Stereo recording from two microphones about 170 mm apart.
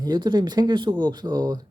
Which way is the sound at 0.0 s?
25° right (ahead or behind).